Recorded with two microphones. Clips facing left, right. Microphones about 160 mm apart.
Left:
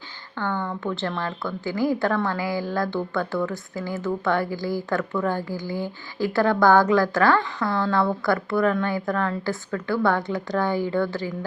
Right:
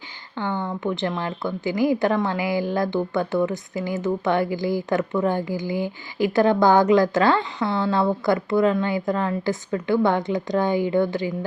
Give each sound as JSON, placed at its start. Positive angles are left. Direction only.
{"t": 0.3, "sound": "a woman's voice", "side_deg": -15}